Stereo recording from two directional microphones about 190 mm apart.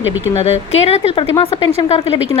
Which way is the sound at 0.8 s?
35° left (ahead or behind).